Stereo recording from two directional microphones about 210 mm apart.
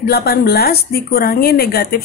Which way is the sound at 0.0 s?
50° left (ahead or behind).